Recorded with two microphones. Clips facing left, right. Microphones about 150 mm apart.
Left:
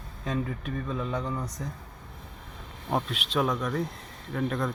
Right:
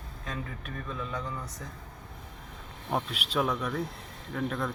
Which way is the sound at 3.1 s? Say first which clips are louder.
Left 2 dB; 5° right (ahead or behind).